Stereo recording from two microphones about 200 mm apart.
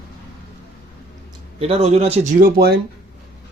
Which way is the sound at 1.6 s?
30° right (ahead or behind).